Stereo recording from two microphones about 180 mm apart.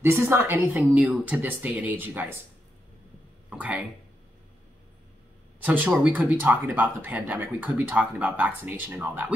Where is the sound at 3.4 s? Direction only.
10° right (ahead or behind).